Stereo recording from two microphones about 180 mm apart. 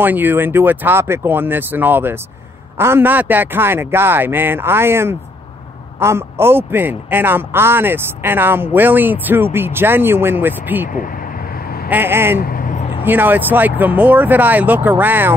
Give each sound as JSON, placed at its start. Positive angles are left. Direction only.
{"t": 0.0, "sound": "a man's voice", "side_deg": -10}
{"t": 11.9, "sound": "a man's voice", "side_deg": -10}
{"t": 12.4, "sound": "vehicle", "side_deg": 50}
{"t": 13.0, "sound": "a man's voice", "side_deg": -10}